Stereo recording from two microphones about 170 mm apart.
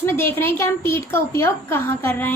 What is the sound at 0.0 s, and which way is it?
A woman's voice, 15° left (ahead or behind).